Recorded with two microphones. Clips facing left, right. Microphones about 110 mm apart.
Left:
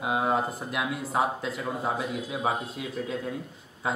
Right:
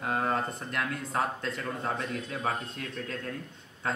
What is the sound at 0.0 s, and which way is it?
A man's voice, 10° left (ahead or behind).